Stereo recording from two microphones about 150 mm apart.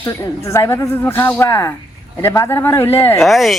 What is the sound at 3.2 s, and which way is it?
Speech, centre (ahead or behind).